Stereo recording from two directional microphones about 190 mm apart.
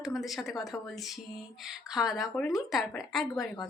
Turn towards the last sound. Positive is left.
turn(degrees=0)  # may be behind; listen again after turning